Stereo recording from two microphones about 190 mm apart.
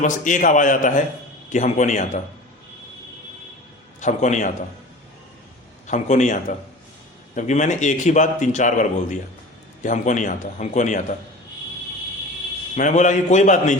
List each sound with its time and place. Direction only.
0.0 s a man's voice: 45° left (ahead or behind)
4.0 s a man's voice: 40° left (ahead or behind)
5.9 s a man's voice: 40° left (ahead or behind)
12.7 s a man's voice: 40° left (ahead or behind)